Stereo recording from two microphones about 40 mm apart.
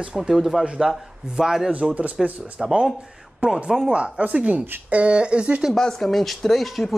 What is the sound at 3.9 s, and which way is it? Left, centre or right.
Speech, right.